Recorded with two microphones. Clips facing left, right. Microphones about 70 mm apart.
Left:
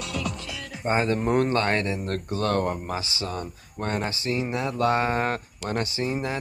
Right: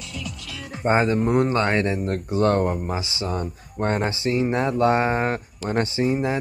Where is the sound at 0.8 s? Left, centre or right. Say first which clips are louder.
Right 5 dB; right.